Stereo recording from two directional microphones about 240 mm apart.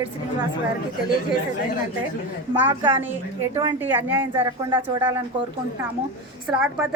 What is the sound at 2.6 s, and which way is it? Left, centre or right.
A woman's voice, centre.